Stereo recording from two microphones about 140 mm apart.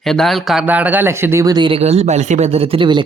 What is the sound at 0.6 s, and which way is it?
Speech, 10° right (ahead or behind).